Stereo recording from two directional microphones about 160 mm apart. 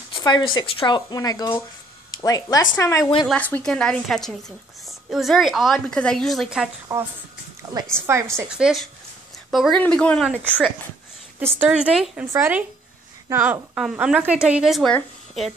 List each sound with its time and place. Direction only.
0.1 s a woman's voice: 25° left (ahead or behind); by 6.7 s centre (ahead or behind)
6.9 s speech: 25° right (ahead or behind)
8.4 s a woman's voice: 5° right (ahead or behind)
11.3 s a woman's voice: 10° right (ahead or behind); by 15.5 s 5° left (ahead or behind)